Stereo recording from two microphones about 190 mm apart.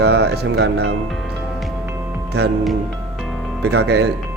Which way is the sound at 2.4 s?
60° right (ahead or behind).